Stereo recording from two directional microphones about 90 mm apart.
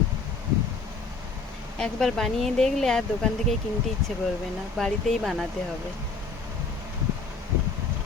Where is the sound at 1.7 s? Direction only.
5° left (ahead or behind).